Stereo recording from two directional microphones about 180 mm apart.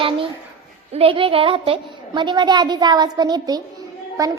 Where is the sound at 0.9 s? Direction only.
30° right (ahead or behind).